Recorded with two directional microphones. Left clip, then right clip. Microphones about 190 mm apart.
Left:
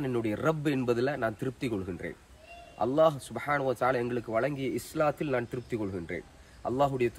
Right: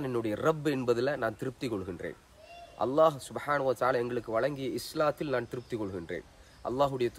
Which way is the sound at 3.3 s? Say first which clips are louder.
Even; 20° right (ahead or behind).